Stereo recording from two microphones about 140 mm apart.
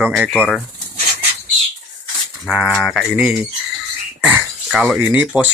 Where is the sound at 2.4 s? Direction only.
Centre (ahead or behind).